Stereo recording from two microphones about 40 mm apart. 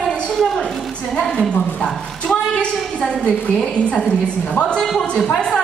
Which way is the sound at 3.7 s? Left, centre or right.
Left.